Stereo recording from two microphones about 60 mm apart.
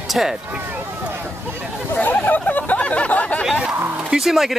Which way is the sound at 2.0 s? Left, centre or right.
Left.